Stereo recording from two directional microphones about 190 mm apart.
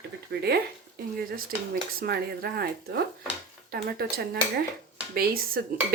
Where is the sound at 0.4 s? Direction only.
55° right (ahead or behind).